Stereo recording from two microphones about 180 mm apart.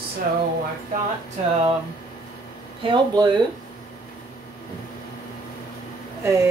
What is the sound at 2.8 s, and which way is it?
Speech, 25° right (ahead or behind).